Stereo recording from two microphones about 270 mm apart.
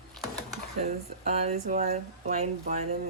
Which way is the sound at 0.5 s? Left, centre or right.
Right.